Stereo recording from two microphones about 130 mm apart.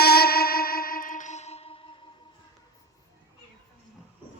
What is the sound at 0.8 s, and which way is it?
Music, 90° left.